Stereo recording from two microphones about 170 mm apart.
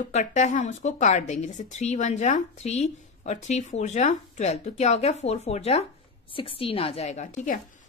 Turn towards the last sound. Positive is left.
turn(degrees=50)  # may be behind; listen again after turning